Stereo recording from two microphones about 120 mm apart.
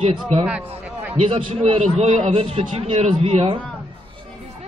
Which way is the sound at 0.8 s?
15° right (ahead or behind).